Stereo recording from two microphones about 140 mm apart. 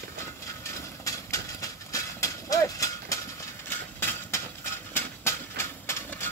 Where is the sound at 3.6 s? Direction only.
15° left (ahead or behind).